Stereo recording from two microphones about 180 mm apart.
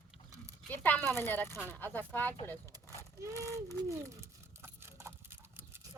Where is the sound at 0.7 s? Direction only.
10° left (ahead or behind).